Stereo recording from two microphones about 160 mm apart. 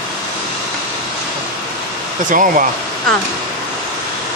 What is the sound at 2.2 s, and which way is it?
Speech, 55° right (ahead or behind).